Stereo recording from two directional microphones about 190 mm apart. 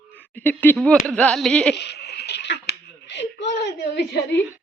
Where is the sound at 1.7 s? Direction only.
65° left (ahead or behind).